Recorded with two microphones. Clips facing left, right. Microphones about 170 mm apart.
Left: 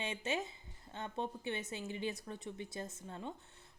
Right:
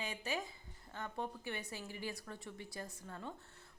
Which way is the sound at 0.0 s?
25° left (ahead or behind).